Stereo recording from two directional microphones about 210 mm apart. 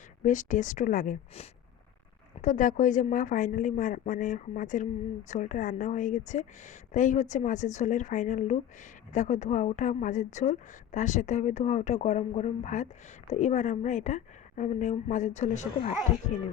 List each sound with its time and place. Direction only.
0.2 s a woman's voice: 35° left (ahead or behind)